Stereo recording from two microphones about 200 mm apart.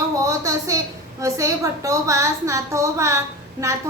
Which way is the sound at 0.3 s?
15° right (ahead or behind).